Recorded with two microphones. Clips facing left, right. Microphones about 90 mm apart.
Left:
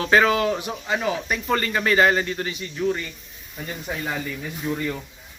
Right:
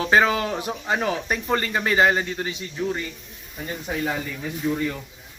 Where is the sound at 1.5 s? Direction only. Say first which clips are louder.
Left 2 dB; 25° right (ahead or behind).